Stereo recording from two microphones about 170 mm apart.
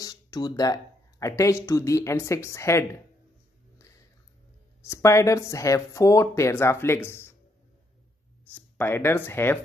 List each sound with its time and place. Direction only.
0.0 s a sound: 25° left (ahead or behind)
1.2 s speech: 20° left (ahead or behind)
4.8 s speech: 15° left (ahead or behind)
8.5 s speech: 10° left (ahead or behind)